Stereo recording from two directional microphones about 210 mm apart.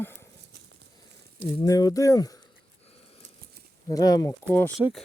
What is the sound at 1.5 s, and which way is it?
Speech, 15° left (ahead or behind).